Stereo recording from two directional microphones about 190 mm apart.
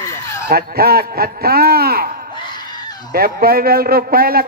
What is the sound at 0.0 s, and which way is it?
Fowl, 15° left (ahead or behind).